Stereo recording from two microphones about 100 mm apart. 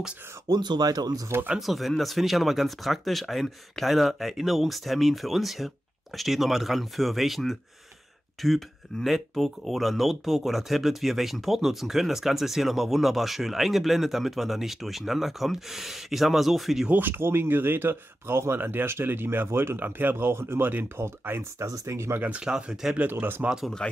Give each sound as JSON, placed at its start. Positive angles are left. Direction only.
{"t": 0.5, "sound": "speech", "side_deg": -45}
{"t": 1.5, "sound": "speech", "side_deg": 0}
{"t": 16.9, "sound": "speech", "side_deg": -20}
{"t": 22.2, "sound": "speech", "side_deg": -10}
{"t": 23.0, "sound": "speech", "side_deg": -20}
{"t": 23.8, "sound": "speech", "side_deg": 10}